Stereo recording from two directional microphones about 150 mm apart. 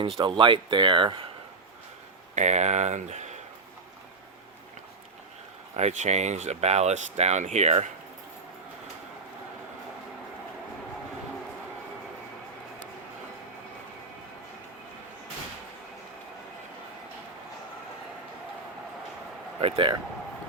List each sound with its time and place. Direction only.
0.0 s speech: 35° right (ahead or behind)
2.3 s speech: 50° right (ahead or behind)
5.7 s speech: 50° right (ahead or behind)
19.6 s speech: 35° right (ahead or behind)